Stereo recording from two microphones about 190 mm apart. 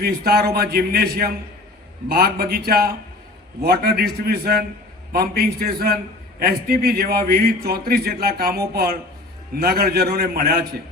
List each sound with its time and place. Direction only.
0.0 s a man's voice: 55° right (ahead or behind)